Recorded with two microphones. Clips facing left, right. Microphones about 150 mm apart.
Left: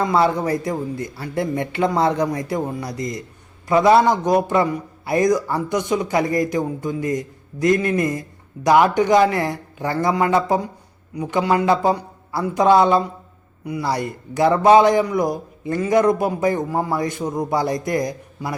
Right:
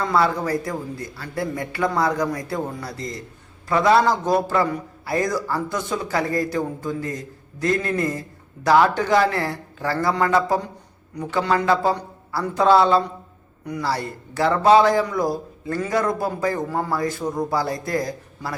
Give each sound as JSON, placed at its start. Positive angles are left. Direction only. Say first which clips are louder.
{"t": 0.0, "sound": "a man's voice", "louder": "left 3 dB", "side_deg": 20}